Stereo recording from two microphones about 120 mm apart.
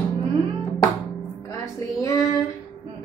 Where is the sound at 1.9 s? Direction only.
30° left (ahead or behind).